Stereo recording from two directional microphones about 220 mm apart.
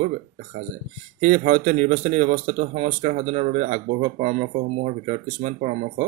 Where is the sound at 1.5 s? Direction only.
30° right (ahead or behind).